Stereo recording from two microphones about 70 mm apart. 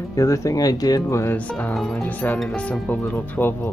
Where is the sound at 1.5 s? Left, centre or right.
Left.